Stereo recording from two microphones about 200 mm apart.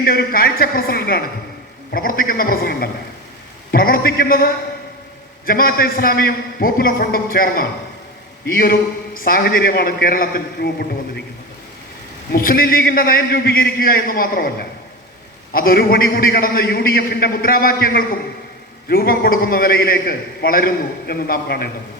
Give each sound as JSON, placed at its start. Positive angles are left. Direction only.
{"t": 0.0, "sound": "a man's voice", "side_deg": 50}
{"t": 12.3, "sound": "a man's voice", "side_deg": 45}
{"t": 15.5, "sound": "a man's voice", "side_deg": 50}